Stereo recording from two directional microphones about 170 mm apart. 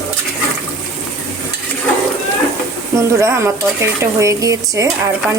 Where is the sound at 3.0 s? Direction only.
15° right (ahead or behind).